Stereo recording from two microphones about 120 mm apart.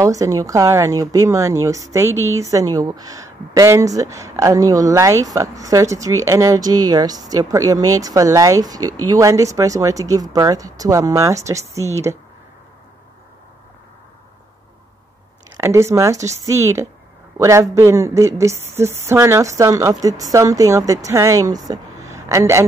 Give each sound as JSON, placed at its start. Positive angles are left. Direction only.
{"t": 0.0, "sound": "a woman's voice", "side_deg": -30}
{"t": 15.5, "sound": "a woman's voice", "side_deg": -25}